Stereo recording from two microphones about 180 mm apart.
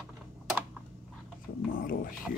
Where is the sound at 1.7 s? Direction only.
50° left (ahead or behind).